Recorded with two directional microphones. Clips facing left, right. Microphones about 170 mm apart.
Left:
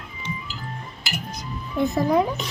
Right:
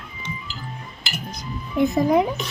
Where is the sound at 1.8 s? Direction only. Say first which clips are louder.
Right 2 dB; 15° right (ahead or behind).